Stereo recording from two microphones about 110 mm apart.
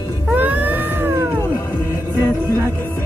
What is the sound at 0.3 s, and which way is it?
Cat, 15° right (ahead or behind).